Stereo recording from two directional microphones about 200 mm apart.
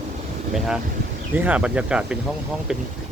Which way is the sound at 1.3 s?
5° right (ahead or behind).